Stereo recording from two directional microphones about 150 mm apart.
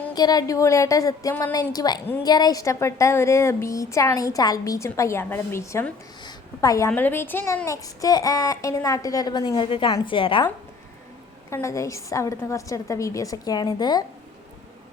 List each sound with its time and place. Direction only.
0.1 s a woman's voice: 25° left (ahead or behind)
11.5 s a woman's voice: 20° left (ahead or behind)